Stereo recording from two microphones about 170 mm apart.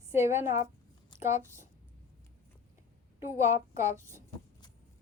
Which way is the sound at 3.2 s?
15° right (ahead or behind).